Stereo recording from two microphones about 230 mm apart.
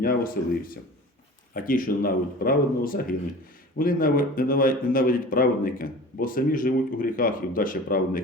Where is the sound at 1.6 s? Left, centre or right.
Left.